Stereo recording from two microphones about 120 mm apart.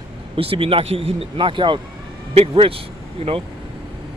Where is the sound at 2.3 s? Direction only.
55° right (ahead or behind).